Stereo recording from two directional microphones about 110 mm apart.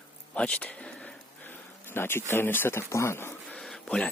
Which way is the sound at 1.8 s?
20° left (ahead or behind).